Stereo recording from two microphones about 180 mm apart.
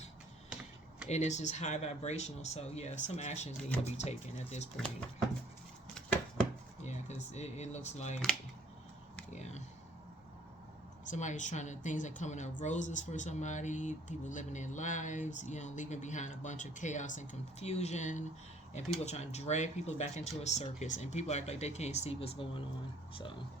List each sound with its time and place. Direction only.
1.0 s speech: 40° left (ahead or behind)
6.8 s speech: 40° left (ahead or behind)
9.3 s a sound: 40° left (ahead or behind)
11.0 s a woman's voice: 45° left (ahead or behind)